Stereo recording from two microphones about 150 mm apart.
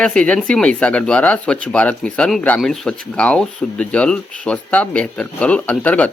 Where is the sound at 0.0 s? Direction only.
5° left (ahead or behind).